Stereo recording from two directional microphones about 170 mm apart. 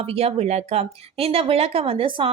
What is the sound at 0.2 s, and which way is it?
Speech, 40° right (ahead or behind).